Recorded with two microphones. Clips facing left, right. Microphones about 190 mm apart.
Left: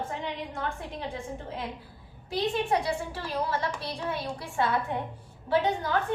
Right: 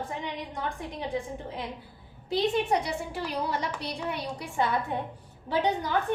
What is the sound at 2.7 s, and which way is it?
A woman's voice, 15° right (ahead or behind).